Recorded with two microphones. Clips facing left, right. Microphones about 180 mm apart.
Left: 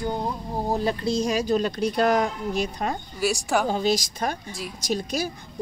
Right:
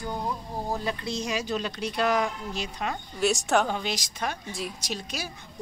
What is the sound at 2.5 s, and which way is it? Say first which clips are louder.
Speech: left 7 dB; 55° left (ahead or behind).